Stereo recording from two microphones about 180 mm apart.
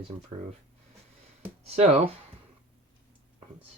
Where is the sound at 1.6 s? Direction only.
35° right (ahead or behind).